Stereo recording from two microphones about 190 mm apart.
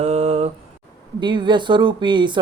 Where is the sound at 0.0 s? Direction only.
35° right (ahead or behind).